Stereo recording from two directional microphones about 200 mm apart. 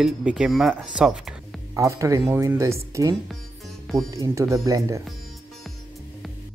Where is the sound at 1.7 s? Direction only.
15° right (ahead or behind).